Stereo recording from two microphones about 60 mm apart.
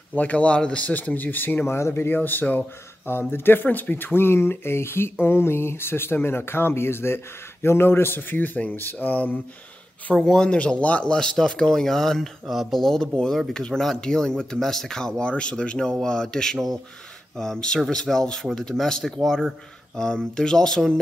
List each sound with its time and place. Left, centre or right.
0.1 s a man's voice: left
0.8 s speech: left
1.7 s speech: left
2.1 s a man's voice: left
10.1 s speech: centre
16.5 s speech: centre
17.4 s speech: centre